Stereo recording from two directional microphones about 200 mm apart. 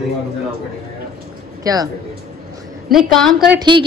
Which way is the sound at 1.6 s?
20° right (ahead or behind).